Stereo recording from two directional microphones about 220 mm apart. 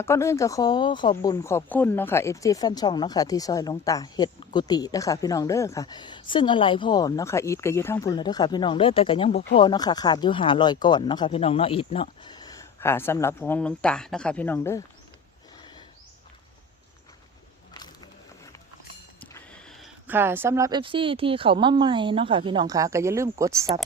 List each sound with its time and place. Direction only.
0.0 s speech: 10° left (ahead or behind)
17.7 s a sound: 20° left (ahead or behind)
19.2 s speech: 5° left (ahead or behind); by 23.6 s 15° right (ahead or behind)